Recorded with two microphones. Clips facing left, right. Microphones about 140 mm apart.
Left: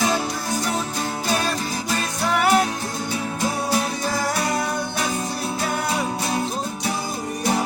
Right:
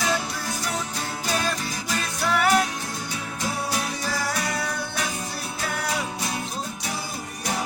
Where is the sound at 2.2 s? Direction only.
20° left (ahead or behind).